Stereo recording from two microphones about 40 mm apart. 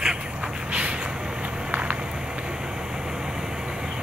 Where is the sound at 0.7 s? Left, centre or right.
Right.